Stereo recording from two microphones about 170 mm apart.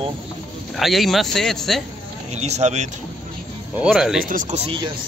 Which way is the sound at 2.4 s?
40° right (ahead or behind).